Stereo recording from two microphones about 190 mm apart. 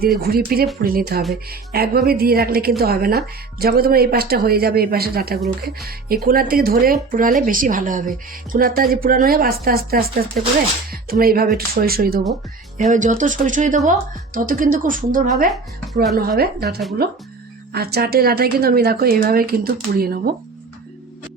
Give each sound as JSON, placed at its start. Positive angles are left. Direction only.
{"t": 0.2, "sound": "a woman's voice", "side_deg": -55}
{"t": 12.3, "sound": "a woman's voice", "side_deg": -40}
{"t": 16.1, "sound": "a woman's voice", "side_deg": -55}